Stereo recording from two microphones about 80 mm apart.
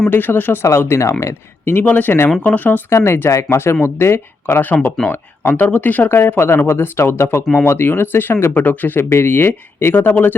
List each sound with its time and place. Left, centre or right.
0.1 s speech: left